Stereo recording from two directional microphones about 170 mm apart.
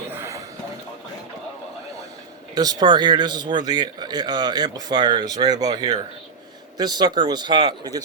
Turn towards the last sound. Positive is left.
turn(degrees=-25)  # may be behind; listen again after turning